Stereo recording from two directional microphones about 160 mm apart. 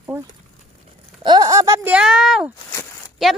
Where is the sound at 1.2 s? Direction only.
25° right (ahead or behind).